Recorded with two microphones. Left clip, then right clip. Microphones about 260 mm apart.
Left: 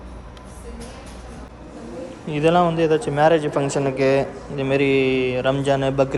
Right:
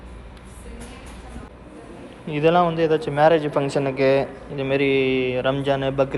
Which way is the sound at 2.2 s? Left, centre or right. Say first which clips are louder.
Even; centre.